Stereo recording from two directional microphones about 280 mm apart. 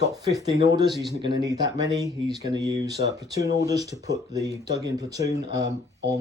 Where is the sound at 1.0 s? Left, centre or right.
Right.